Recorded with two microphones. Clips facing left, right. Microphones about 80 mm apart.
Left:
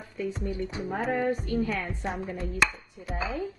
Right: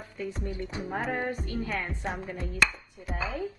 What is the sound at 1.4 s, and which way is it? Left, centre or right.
Speech, right.